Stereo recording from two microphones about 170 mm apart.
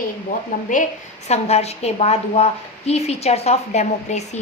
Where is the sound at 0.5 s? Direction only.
50° left (ahead or behind).